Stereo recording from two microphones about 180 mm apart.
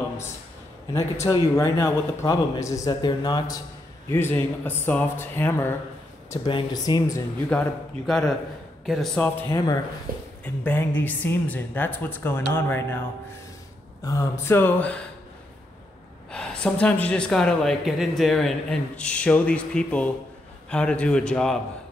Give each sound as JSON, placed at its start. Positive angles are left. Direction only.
{"t": 1.2, "sound": "speech", "side_deg": 15}
{"t": 6.4, "sound": "speech", "side_deg": 25}
{"t": 8.1, "sound": "speech", "side_deg": 5}
{"t": 14.0, "sound": "speech", "side_deg": 15}
{"t": 16.3, "sound": "speech", "side_deg": 5}